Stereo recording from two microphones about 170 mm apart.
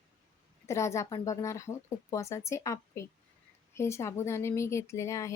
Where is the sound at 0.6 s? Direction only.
15° left (ahead or behind).